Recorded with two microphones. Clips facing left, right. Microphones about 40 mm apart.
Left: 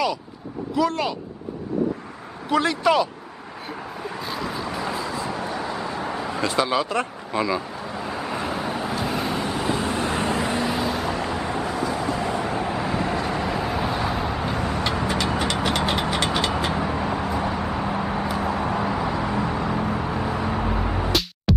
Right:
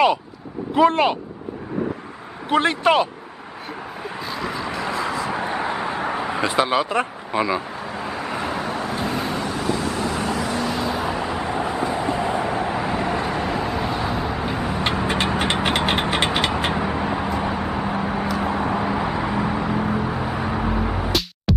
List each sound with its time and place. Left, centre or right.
0.7 s speech: right
2.5 s speech: right
4.2 s vehicle: centre
5.0 s vehicle: right; by 9.6 s centre
9.8 s vehicle: left
10.6 s vehicle: centre
10.9 s vehicle: centre
11.7 s vehicle: right
13.5 s vehicle: centre
15.0 s mechanisms: right
16.7 s vehicle: centre